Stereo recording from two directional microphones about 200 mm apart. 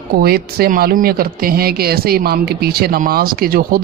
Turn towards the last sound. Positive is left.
turn(degrees=-45)  # may be behind; listen again after turning